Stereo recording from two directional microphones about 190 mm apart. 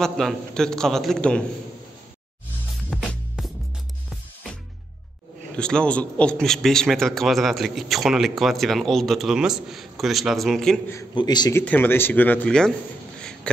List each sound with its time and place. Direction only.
0.0 s a man's voice: centre (ahead or behind)
2.9 s music: 5° left (ahead or behind)
5.6 s a man's voice: 5° left (ahead or behind)
10.9 s a man's voice: 20° left (ahead or behind)
11.6 s speech: 10° left (ahead or behind)
13.2 s a sound: 5° left (ahead or behind)